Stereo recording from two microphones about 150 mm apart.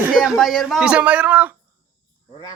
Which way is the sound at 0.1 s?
Centre (ahead or behind).